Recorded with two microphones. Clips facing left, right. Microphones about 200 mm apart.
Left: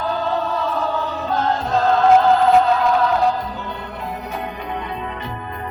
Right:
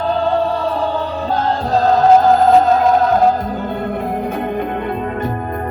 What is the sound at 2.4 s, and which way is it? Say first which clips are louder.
Music: right 4 dB; 45° right (ahead or behind).